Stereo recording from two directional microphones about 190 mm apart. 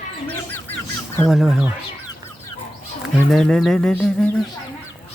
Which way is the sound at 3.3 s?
Centre (ahead or behind).